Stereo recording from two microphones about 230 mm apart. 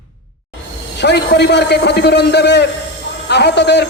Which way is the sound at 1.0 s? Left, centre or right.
Left.